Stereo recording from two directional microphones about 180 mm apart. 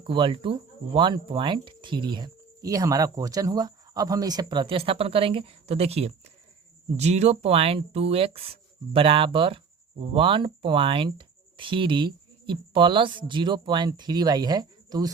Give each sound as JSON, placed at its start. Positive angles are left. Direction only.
{"t": 0.0, "sound": "speech", "side_deg": -30}